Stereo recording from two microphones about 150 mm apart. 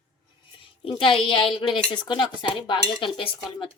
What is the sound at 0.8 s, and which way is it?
Speech, 35° left (ahead or behind).